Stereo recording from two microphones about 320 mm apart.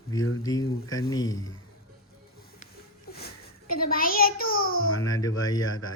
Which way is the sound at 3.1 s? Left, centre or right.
Left.